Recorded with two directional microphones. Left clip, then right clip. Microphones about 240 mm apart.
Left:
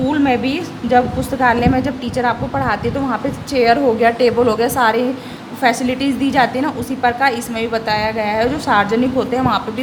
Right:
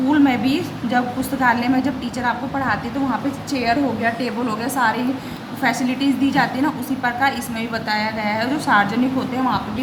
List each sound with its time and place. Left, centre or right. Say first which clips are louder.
0.1 s a woman's voice: right 1 dB; left